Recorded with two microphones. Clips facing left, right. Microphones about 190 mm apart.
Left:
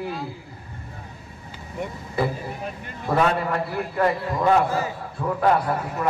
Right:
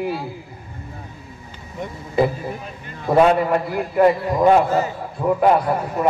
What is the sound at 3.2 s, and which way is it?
A man's voice, 20° right (ahead or behind).